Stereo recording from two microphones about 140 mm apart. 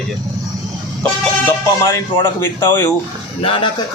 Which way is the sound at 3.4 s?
40° left (ahead or behind).